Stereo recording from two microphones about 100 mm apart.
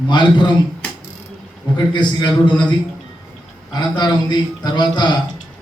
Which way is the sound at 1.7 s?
50° left (ahead or behind).